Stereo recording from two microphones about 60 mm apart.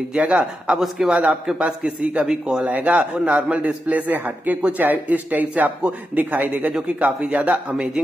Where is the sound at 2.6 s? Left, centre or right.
Right.